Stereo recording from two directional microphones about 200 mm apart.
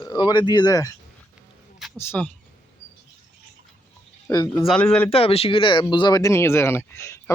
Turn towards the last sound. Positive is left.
turn(degrees=15)  # may be behind; listen again after turning